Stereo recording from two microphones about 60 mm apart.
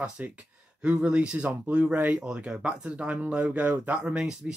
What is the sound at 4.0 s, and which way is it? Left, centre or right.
Speech, centre.